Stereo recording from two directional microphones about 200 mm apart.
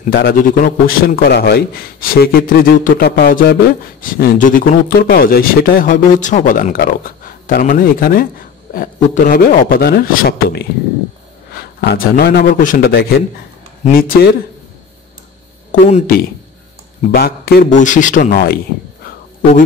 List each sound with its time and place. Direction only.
0.0 s a man's voice: 50° left (ahead or behind)
15.8 s speech: 40° left (ahead or behind)
17.1 s a man's voice: 50° left (ahead or behind)